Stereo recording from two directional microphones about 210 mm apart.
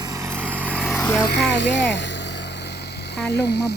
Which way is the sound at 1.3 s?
55° left (ahead or behind).